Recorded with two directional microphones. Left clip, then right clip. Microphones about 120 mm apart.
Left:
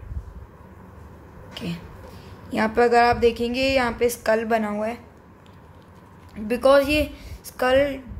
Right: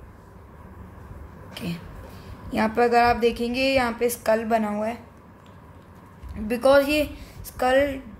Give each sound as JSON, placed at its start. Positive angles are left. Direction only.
{"t": 1.5, "sound": "a sound", "side_deg": 15}
{"t": 2.5, "sound": "a woman's voice", "side_deg": 20}
{"t": 6.3, "sound": "a woman's voice", "side_deg": 20}